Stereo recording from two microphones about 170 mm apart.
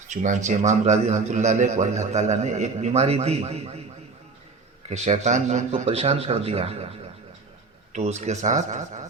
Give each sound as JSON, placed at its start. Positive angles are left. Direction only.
{"t": 0.1, "sound": "a man's voice", "side_deg": -45}
{"t": 4.9, "sound": "a man's voice", "side_deg": -40}
{"t": 7.9, "sound": "a man's voice", "side_deg": -40}